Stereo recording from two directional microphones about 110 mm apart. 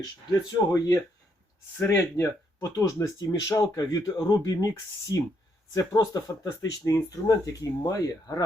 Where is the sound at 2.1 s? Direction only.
30° left (ahead or behind).